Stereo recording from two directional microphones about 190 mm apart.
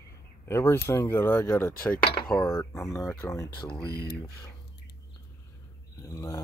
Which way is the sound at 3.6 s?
25° left (ahead or behind).